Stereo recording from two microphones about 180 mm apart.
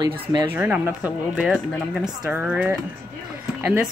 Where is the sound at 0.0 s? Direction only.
20° right (ahead or behind).